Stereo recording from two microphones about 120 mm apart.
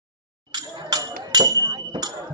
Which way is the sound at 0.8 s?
35° right (ahead or behind).